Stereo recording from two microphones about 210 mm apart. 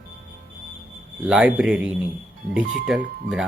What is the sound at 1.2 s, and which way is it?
Speech, 5° right (ahead or behind).